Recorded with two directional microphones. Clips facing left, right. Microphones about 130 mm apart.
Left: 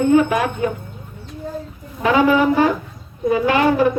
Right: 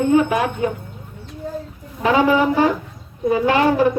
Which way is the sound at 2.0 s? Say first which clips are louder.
Left 1 dB; 30° right (ahead or behind).